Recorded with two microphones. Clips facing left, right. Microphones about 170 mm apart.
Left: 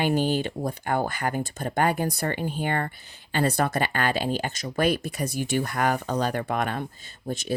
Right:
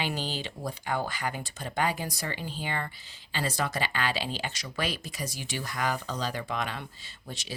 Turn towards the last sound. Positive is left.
turn(degrees=45)  # may be behind; listen again after turning